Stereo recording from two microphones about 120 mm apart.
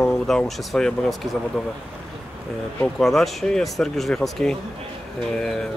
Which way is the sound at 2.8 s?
Centre (ahead or behind).